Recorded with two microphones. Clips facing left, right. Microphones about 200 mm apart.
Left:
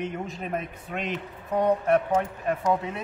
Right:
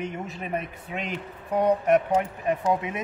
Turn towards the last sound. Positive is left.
turn(degrees=-15)  # may be behind; listen again after turning